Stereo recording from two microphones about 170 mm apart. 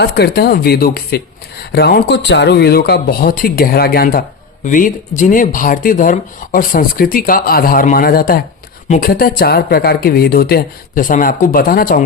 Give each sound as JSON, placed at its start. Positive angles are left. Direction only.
{"t": 0.0, "sound": "speech", "side_deg": 75}
{"t": 4.6, "sound": "speech", "side_deg": 50}